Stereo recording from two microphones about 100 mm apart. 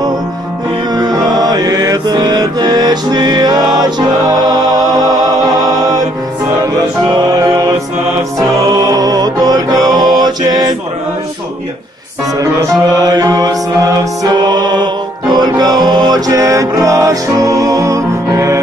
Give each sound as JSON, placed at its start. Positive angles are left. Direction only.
{"t": 0.9, "sound": "music", "side_deg": -40}
{"t": 7.1, "sound": "music", "side_deg": -40}
{"t": 12.4, "sound": "music", "side_deg": -40}